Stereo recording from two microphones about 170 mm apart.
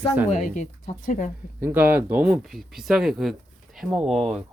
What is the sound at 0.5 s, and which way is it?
Speech, 50° left (ahead or behind).